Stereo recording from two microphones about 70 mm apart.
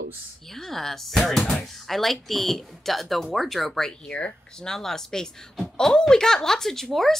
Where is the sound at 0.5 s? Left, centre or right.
Centre.